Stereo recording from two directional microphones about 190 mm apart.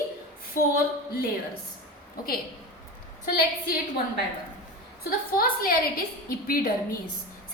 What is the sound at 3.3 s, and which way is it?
A woman's voice, 50° left (ahead or behind).